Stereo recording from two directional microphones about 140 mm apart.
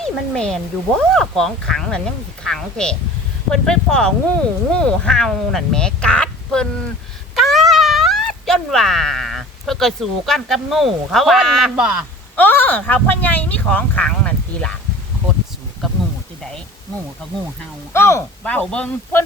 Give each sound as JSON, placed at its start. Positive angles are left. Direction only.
{"t": 0.0, "sound": "a woman's voice", "side_deg": 5}
{"t": 12.4, "sound": "speech", "side_deg": 15}
{"t": 17.9, "sound": "speech", "side_deg": 20}